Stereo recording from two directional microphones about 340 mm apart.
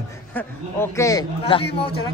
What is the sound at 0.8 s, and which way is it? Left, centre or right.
Speech, centre.